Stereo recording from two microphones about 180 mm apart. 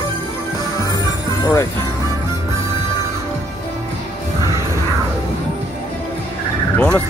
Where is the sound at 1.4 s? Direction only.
15° left (ahead or behind).